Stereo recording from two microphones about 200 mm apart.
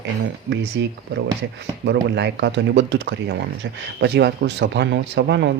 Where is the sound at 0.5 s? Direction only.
60° right (ahead or behind).